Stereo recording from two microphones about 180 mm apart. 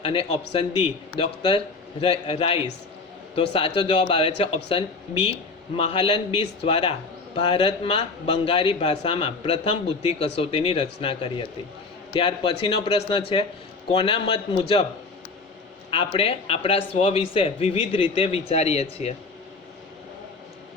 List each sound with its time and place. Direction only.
0.0 s a man's voice: 30° left (ahead or behind)
15.9 s a man's voice: 30° left (ahead or behind)